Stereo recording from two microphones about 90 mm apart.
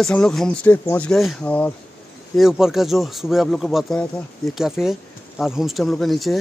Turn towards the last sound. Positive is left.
turn(degrees=0)  # may be behind; listen again after turning